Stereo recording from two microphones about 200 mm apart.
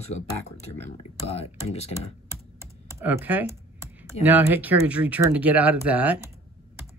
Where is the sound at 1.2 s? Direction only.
30° left (ahead or behind).